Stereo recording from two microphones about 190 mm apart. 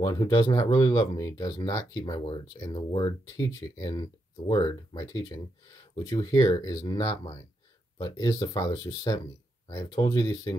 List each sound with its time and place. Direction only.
0.0 s speech: 20° left (ahead or behind)